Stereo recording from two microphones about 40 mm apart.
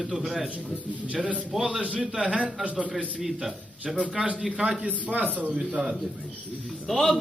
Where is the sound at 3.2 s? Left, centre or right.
Centre.